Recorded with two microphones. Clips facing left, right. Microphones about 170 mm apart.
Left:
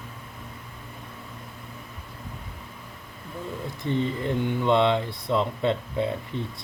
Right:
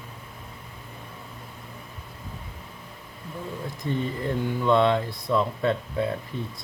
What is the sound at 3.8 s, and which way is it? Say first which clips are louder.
Speech: left 2 dB; 20° left (ahead or behind).